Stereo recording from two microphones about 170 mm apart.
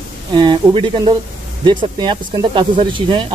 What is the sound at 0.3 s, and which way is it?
Speech, 25° right (ahead or behind).